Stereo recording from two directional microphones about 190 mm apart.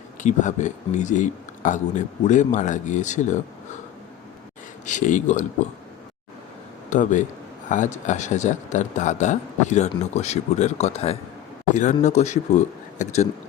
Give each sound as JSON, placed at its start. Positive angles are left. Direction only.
{"t": 0.2, "sound": "speech", "side_deg": 40}
{"t": 4.9, "sound": "speech", "side_deg": 40}
{"t": 6.9, "sound": "a man's voice", "side_deg": 40}